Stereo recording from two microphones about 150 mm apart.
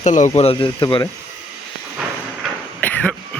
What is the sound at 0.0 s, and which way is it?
Speech, 55° left (ahead or behind).